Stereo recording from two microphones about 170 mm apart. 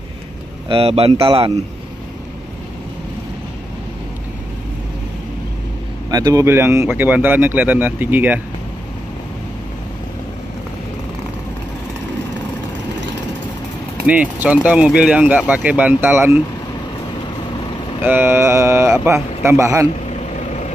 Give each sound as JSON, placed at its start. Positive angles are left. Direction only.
{"t": 0.7, "sound": "speech", "side_deg": -35}
{"t": 6.0, "sound": "speech", "side_deg": -20}
{"t": 14.0, "sound": "speech", "side_deg": -10}
{"t": 18.0, "sound": "speech", "side_deg": -10}
{"t": 20.3, "sound": "vehicle", "side_deg": 40}